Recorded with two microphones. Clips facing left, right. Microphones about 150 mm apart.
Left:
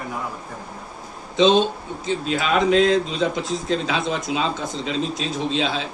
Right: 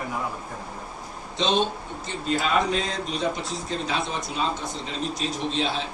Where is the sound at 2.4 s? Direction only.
90° left.